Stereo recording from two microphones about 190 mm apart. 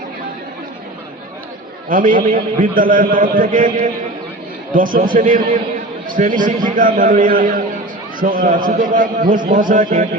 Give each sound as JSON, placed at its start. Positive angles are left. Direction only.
{"t": 1.9, "sound": "a man's voice", "side_deg": -45}